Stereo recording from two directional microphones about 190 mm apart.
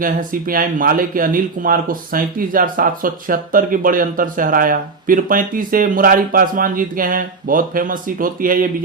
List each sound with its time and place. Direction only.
0.0 s speech: 45° right (ahead or behind)